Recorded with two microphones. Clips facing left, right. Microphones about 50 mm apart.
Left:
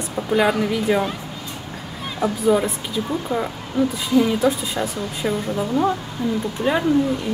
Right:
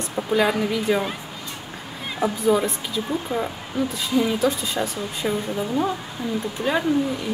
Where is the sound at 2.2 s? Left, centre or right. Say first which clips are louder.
Left 2 dB; centre.